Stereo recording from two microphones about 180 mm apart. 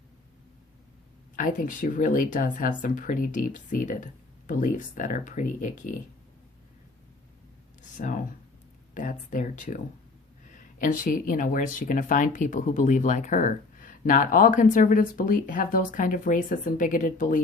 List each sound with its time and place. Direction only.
1.4 s speech: 45° left (ahead or behind)
7.9 s speech: 45° left (ahead or behind)